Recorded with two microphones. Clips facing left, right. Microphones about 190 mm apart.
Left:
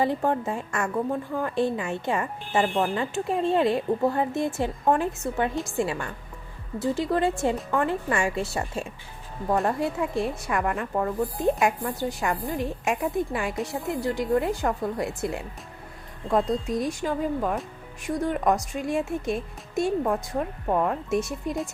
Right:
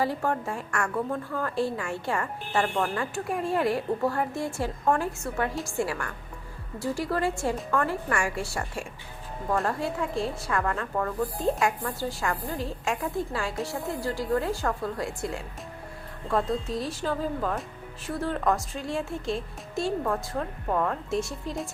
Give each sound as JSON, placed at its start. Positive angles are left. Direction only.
{"t": 0.0, "sound": "a woman's voice", "side_deg": 20}
{"t": 16.6, "sound": "speech", "side_deg": 15}